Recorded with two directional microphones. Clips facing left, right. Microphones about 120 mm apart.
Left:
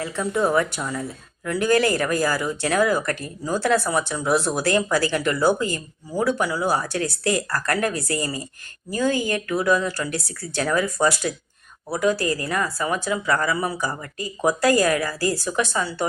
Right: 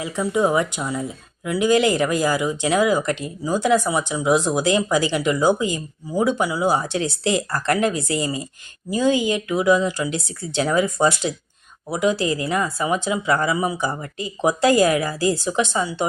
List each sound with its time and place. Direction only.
0.0 s speech: 15° right (ahead or behind)